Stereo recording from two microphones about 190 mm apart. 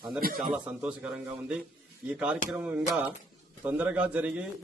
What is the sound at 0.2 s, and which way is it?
Speech, 50° right (ahead or behind).